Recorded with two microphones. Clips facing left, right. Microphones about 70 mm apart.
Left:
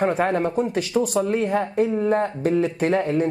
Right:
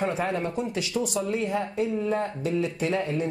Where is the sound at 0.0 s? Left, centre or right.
Left.